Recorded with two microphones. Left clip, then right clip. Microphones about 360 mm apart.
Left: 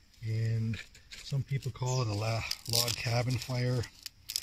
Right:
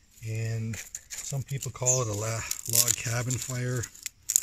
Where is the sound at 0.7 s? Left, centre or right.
Centre.